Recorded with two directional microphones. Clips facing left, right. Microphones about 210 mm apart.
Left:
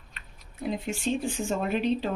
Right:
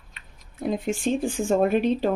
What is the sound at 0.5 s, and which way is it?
Speech, 50° right (ahead or behind).